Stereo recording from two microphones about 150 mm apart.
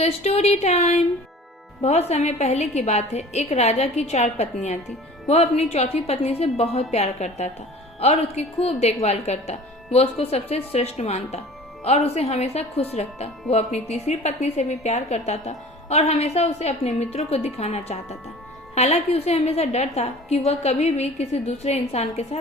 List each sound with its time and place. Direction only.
0.0 s speech: 45° left (ahead or behind)